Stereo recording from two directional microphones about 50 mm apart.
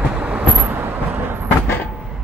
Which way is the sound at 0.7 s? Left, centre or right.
Right.